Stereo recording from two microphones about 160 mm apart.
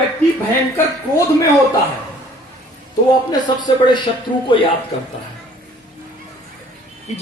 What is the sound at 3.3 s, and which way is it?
Speech, 25° left (ahead or behind).